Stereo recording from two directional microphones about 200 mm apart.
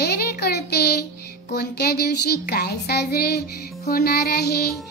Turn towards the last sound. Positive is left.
turn(degrees=50)  # may be behind; listen again after turning